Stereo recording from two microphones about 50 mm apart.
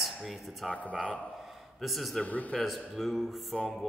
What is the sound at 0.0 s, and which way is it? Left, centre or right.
Speech, centre.